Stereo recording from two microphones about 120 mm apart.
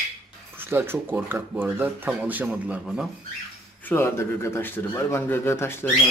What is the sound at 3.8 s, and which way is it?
Speech, 20° left (ahead or behind).